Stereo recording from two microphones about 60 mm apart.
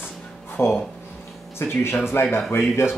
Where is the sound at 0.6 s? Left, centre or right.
Left.